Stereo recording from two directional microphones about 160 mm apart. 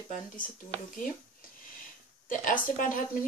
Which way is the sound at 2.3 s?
55° left (ahead or behind).